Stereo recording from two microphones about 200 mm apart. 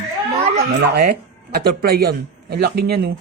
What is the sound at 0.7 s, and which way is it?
A woman's voice, 55° right (ahead or behind).